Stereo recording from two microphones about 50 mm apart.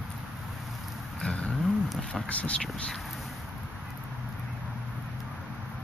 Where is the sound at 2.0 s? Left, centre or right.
Centre.